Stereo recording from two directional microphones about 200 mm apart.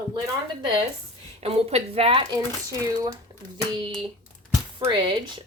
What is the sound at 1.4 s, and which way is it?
Speech, 30° right (ahead or behind).